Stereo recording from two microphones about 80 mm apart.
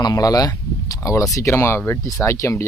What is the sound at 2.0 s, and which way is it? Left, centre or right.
Speech, left.